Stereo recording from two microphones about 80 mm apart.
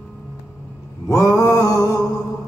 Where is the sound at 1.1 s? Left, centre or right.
Left.